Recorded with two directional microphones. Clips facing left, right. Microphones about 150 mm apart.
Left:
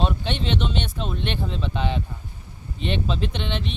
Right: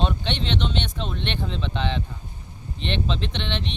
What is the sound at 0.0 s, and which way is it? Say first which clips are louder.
Speech: left 1 dB; 5° left (ahead or behind).